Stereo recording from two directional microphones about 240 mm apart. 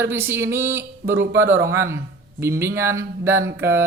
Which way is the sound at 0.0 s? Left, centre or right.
Centre.